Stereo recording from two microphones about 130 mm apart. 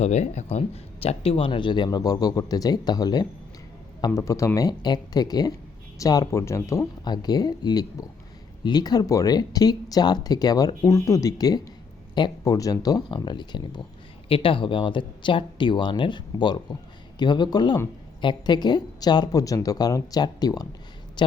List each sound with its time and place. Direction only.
0.0 s a woman's voice: 60° left (ahead or behind); by 21.3 s 35° left (ahead or behind)